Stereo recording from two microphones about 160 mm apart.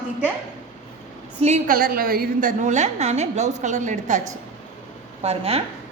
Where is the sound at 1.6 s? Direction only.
65° right (ahead or behind).